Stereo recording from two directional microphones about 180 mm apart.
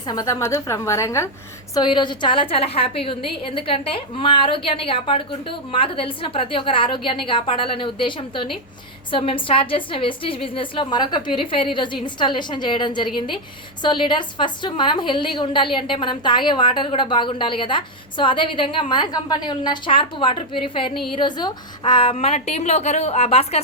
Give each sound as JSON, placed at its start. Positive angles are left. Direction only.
{"t": 0.0, "sound": "a woman's voice", "side_deg": 20}